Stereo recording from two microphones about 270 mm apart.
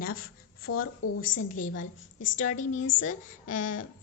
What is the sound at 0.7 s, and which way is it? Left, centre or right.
Speech, left.